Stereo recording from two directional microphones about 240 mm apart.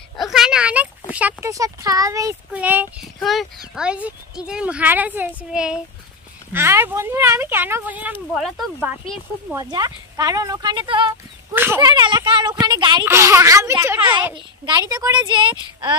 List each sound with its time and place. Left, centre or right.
0.2 s a sound: centre
1.1 s speech: centre
9.6 s speech: centre